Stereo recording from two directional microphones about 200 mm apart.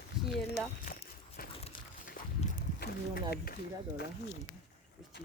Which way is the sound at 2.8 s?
50° left (ahead or behind).